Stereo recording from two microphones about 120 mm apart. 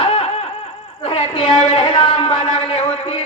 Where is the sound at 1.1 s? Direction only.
45° left (ahead or behind).